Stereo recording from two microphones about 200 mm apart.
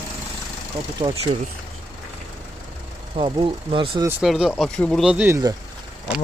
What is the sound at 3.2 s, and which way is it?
Speech, 20° right (ahead or behind).